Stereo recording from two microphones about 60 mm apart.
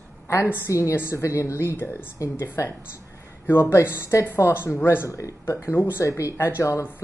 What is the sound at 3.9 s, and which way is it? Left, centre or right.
Speech, left.